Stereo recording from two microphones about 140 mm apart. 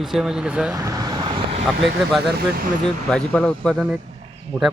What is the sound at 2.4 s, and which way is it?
Speech, 90° right.